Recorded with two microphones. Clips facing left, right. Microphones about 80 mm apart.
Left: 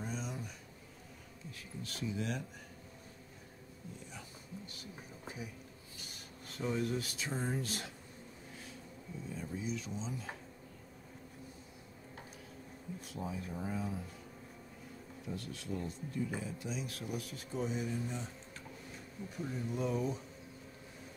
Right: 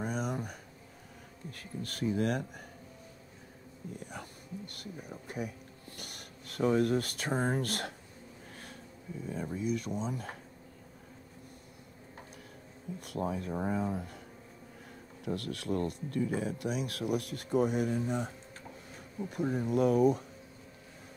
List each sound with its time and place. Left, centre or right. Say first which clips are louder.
0.0 s a sound: right 7 dB; right
1.5 s speech: right 5 dB; right
3.9 s speech: right 7 dB; right
13.0 s speech: right 8 dB; right
19.3 s speech: right 9 dB; right